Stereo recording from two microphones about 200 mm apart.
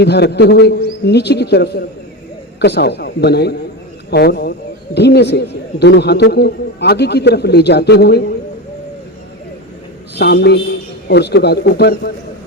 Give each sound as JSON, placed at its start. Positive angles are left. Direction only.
{"t": 0.0, "sound": "a man's voice", "side_deg": 55}
{"t": 10.2, "sound": "a man's voice", "side_deg": 55}